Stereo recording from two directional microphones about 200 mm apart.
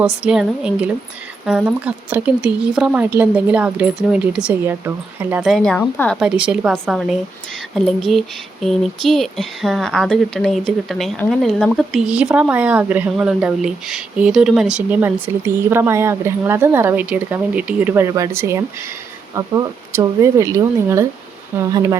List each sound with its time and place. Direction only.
0.2 s a woman's voice: 5° right (ahead or behind)